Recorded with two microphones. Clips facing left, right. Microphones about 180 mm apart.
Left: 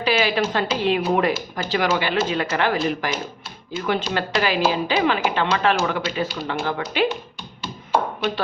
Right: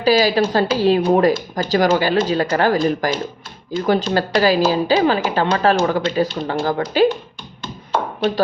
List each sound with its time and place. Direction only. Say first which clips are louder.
0.0 s speech: right 6 dB; 40° right (ahead or behind)